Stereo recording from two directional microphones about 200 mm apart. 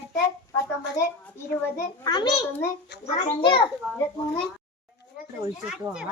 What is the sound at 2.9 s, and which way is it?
Speech, 60° left (ahead or behind).